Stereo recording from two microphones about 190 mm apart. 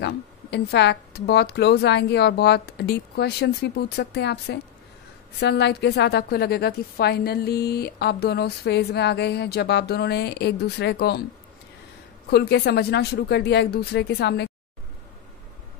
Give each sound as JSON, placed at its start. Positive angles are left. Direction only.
{"t": 0.0, "sound": "a woman's voice", "side_deg": 60}
{"t": 12.3, "sound": "a woman's voice", "side_deg": 60}